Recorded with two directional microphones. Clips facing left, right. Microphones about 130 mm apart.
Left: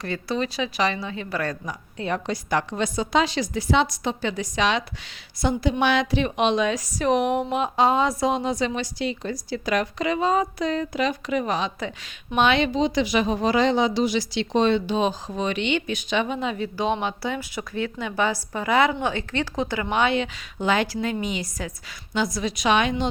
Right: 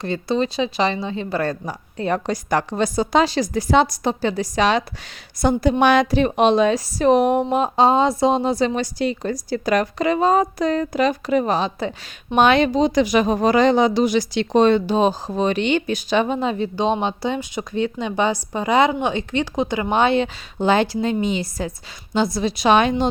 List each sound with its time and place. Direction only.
0.0 s a woman's voice: 25° right (ahead or behind)